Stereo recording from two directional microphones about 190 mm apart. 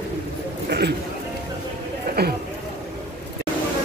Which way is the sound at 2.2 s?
60° right (ahead or behind).